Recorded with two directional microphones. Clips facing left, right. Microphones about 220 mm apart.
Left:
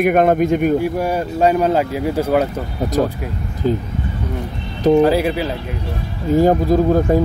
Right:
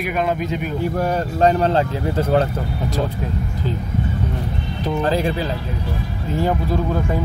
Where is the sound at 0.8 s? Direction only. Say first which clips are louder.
Left 2 dB; 10° left (ahead or behind).